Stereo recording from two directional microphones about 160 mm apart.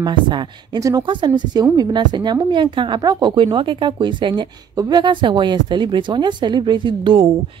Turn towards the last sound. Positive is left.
turn(degrees=-30)  # may be behind; listen again after turning